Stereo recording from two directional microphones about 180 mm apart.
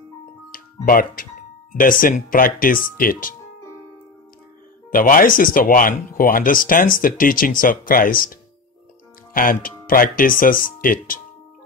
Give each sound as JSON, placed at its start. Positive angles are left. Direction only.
{"t": 0.5, "sound": "music", "side_deg": 50}
{"t": 1.7, "sound": "speech", "side_deg": 50}
{"t": 4.9, "sound": "speech", "side_deg": 50}